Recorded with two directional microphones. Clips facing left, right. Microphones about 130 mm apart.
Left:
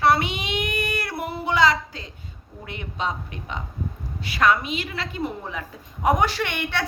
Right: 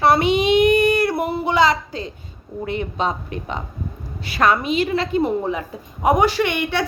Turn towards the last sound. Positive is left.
turn(degrees=-5)  # may be behind; listen again after turning